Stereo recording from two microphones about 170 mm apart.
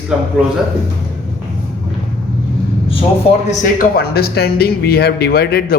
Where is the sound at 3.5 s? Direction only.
60° left (ahead or behind).